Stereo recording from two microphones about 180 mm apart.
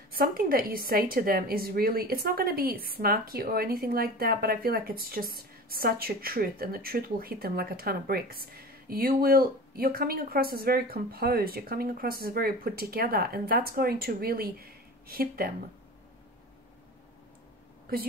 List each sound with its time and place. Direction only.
0.1 s a woman's voice: 55° right (ahead or behind)